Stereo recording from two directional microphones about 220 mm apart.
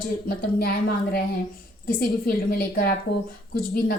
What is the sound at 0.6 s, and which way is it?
A woman's voice, 45° left (ahead or behind).